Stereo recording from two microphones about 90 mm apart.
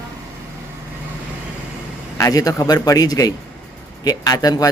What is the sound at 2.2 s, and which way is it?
Speech, 40° left (ahead or behind).